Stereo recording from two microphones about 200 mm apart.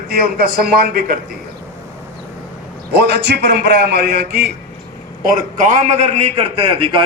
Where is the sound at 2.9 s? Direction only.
55° right (ahead or behind).